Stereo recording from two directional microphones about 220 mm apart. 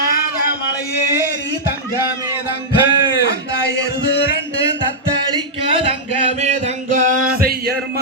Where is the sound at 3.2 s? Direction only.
50° left (ahead or behind).